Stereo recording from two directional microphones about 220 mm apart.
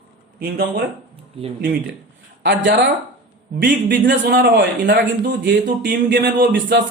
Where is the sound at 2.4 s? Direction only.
50° right (ahead or behind).